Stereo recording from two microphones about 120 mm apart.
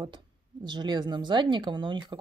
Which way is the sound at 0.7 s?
35° right (ahead or behind).